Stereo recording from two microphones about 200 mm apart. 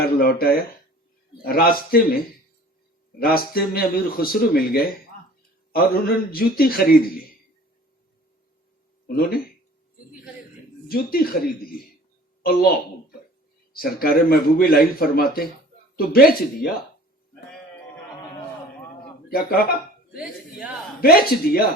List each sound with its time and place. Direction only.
0.0 s speech: 50° left (ahead or behind)
3.2 s speech: 50° left (ahead or behind)
9.0 s speech: 45° left (ahead or behind)
10.8 s a woman's voice: 50° left (ahead or behind)
19.3 s speech: 45° left (ahead or behind)
21.0 s speech: 50° left (ahead or behind)